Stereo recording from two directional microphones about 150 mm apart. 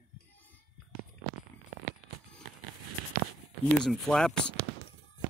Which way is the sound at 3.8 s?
5° left (ahead or behind).